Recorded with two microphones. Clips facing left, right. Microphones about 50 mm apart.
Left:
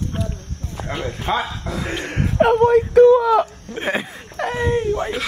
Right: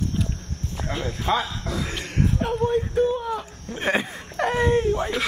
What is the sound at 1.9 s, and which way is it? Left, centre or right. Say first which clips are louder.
Speech: left 2 dB; left.